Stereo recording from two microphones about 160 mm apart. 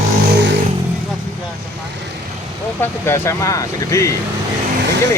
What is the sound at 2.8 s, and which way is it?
Speech, 15° left (ahead or behind).